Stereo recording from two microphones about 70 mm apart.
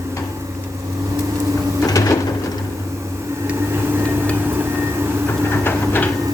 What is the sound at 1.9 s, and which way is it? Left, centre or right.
Printer, left.